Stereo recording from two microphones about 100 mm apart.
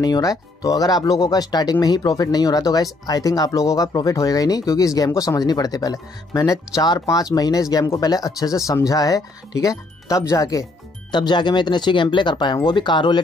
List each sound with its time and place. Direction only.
0.0 s speech: 40° left (ahead or behind)
11.1 s speech: 50° left (ahead or behind)